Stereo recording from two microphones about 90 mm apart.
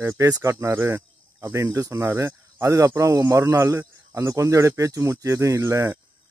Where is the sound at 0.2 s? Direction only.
35° right (ahead or behind).